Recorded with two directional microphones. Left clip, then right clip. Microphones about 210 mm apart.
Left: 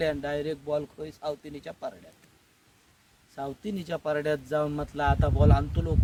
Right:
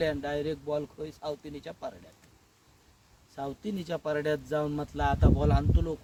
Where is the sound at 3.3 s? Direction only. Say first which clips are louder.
Left 1 dB; 5° left (ahead or behind).